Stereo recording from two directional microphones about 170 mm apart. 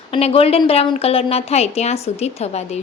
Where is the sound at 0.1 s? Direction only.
35° left (ahead or behind).